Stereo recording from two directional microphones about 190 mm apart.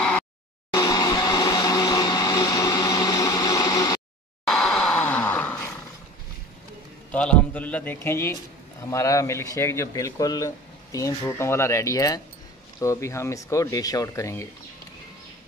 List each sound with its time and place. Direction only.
0.7 s music: 15° left (ahead or behind)
4.5 s groan: 5° left (ahead or behind)
7.1 s speech: 5° left (ahead or behind)